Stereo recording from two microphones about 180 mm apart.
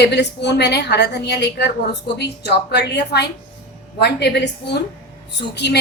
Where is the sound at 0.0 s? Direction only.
70° left (ahead or behind).